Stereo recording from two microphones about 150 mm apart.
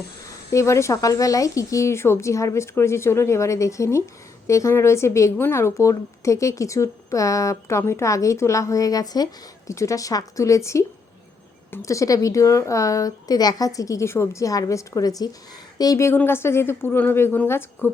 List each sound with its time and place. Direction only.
0.3 s speech: 20° left (ahead or behind)